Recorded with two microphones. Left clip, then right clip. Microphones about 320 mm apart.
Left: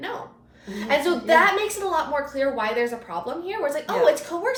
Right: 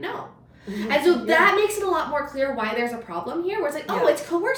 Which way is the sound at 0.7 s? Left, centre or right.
Centre.